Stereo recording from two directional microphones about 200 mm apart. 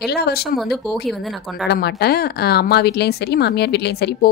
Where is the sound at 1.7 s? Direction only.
55° left (ahead or behind).